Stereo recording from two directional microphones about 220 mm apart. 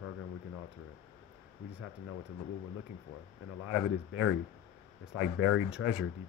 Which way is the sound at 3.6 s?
70° left (ahead or behind).